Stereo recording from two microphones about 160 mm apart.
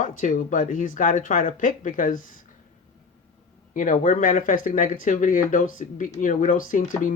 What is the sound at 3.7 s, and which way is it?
Speech, 55° left (ahead or behind).